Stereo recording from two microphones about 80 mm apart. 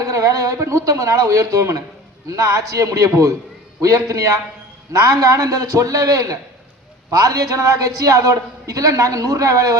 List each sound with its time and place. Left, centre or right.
0.0 s a man's voice: right